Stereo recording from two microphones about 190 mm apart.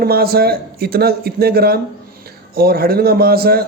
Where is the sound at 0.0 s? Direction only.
55° right (ahead or behind).